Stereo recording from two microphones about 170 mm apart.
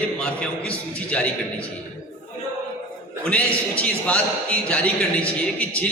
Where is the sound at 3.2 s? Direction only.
5° left (ahead or behind).